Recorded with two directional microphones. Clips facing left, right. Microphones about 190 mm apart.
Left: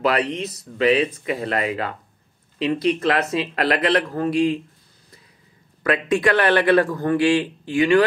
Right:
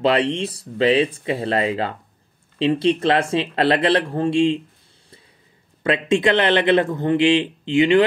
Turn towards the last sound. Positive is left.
turn(degrees=-20)  # may be behind; listen again after turning